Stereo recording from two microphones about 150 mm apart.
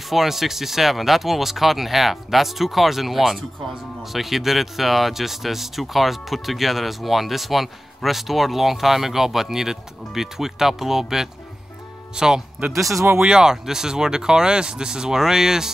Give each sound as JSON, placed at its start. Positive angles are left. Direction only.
{"t": 0.1, "sound": "speech", "side_deg": 0}
{"t": 13.2, "sound": "speech", "side_deg": -5}